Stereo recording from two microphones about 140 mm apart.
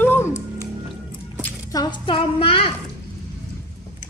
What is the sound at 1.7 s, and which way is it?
A woman's voice, 30° left (ahead or behind).